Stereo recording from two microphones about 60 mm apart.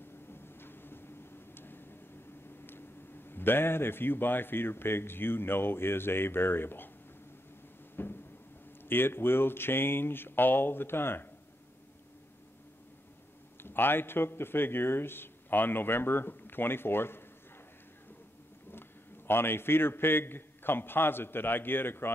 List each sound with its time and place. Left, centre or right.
0.3 s a sound: left
3.3 s speech: left
7.9 s a sound: left
8.8 s speech: left
13.6 s speech: left
18.7 s a man's voice: left